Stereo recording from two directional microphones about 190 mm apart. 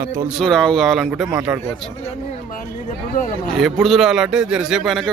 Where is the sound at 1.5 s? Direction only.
15° right (ahead or behind).